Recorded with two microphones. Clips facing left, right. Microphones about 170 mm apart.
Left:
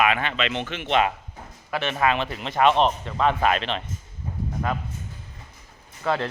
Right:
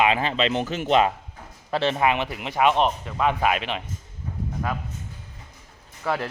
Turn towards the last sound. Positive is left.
turn(degrees=-10)  # may be behind; listen again after turning